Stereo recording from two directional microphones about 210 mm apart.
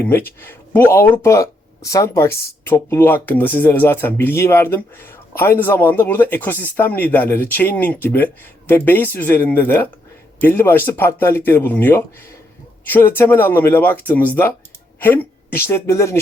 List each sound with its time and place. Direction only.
0.0 s speech: 10° left (ahead or behind)